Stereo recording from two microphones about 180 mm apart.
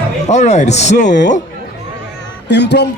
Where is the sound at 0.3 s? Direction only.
40° left (ahead or behind).